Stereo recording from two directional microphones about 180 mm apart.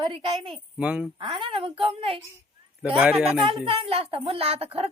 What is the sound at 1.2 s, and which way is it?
Speech, 25° right (ahead or behind).